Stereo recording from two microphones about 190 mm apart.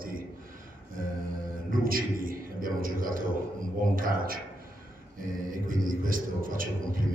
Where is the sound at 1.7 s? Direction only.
50° right (ahead or behind).